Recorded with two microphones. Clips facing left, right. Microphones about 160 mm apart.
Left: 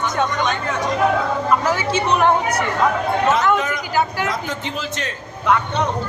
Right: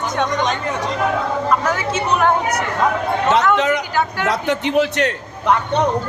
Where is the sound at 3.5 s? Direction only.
75° right (ahead or behind).